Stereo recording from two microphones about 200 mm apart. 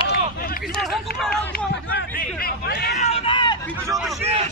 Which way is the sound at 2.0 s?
50° left (ahead or behind).